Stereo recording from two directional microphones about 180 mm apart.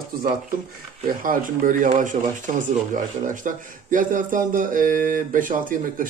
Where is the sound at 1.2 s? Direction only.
50° right (ahead or behind).